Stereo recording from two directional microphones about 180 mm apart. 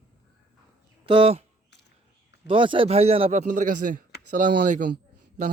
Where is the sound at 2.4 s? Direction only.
30° right (ahead or behind); by 4.9 s 45° right (ahead or behind).